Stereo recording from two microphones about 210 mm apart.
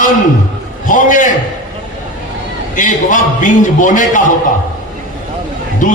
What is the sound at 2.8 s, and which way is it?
A man's voice, 40° left (ahead or behind).